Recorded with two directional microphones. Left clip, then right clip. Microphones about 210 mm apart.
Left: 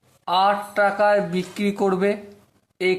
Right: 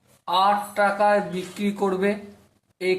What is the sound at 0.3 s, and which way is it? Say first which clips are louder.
A woman's voice: left 1 dB; 45° left (ahead or behind).